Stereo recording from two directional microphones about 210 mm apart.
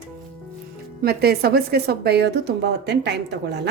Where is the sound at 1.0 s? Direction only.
50° right (ahead or behind).